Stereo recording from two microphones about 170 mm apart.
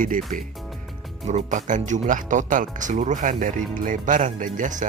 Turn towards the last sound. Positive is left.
turn(degrees=-50)  # may be behind; listen again after turning